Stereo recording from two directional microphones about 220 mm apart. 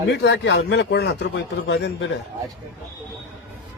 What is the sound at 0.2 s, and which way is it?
A man's voice, 50° left (ahead or behind).